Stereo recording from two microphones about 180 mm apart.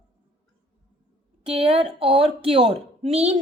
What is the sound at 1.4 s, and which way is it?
A woman's voice, 30° right (ahead or behind).